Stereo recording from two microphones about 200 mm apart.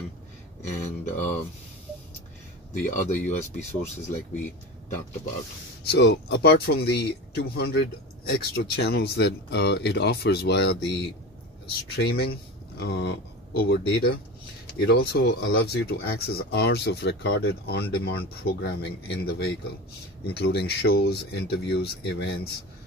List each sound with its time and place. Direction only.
0.7 s speech: 35° left (ahead or behind)
2.8 s speech: 40° left (ahead or behind)
5.9 s speech: 55° left (ahead or behind)